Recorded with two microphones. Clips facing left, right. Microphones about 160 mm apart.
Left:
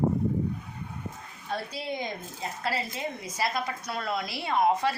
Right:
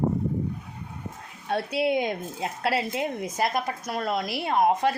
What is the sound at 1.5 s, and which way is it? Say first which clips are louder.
A woman's voice: right 8 dB; 65° right (ahead or behind).